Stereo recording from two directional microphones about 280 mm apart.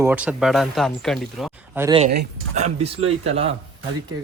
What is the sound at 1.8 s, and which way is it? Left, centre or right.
Speech, centre.